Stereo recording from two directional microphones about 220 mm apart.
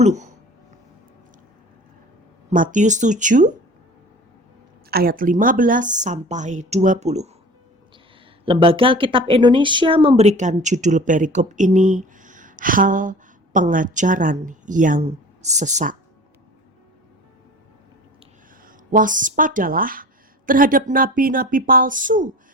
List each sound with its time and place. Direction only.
0.0 s speech: 30° right (ahead or behind)
2.5 s speech: 35° right (ahead or behind)
4.9 s speech: 45° right (ahead or behind)
8.4 s speech: 25° right (ahead or behind)
18.6 s speech: 35° right (ahead or behind)